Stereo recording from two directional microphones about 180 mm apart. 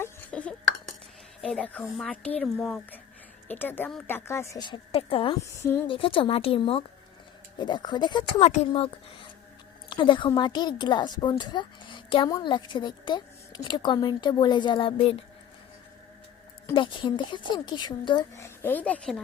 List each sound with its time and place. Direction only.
0.0 s a sound: 5° left (ahead or behind)
1.4 s a woman's voice: 5° left (ahead or behind); by 5.4 s 30° left (ahead or behind)
5.5 s a woman's voice: 15° left (ahead or behind)
5.9 s a woman's voice: 30° left (ahead or behind)
16.7 s a woman's voice: 25° left (ahead or behind)
18.4 s a woman's voice: 10° left (ahead or behind)